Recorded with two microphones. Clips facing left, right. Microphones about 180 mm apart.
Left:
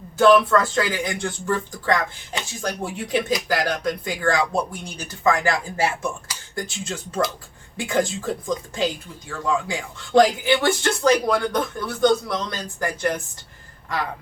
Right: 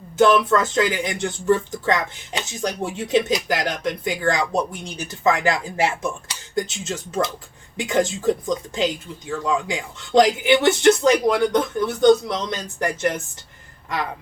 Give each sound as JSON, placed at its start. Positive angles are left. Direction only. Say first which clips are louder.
{"t": 0.2, "sound": "speech", "louder": "left 1 dB", "side_deg": -20}